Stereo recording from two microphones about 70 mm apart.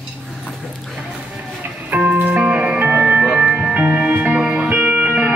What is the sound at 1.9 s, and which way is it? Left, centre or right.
Music, centre.